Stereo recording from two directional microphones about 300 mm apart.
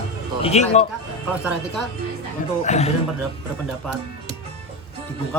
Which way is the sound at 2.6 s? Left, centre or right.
Left.